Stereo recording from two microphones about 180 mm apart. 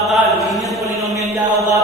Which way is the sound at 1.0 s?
15° right (ahead or behind).